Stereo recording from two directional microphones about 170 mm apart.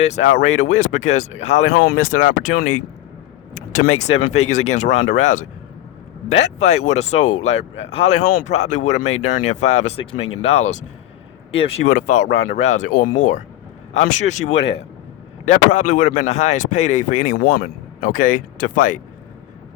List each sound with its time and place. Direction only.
0.0 s speech: 45° left (ahead or behind)
1.7 s speech: 60° left (ahead or behind); by 10.8 s 45° left (ahead or behind)
11.9 s speech: 50° left (ahead or behind)
12.4 s speech: 40° left (ahead or behind)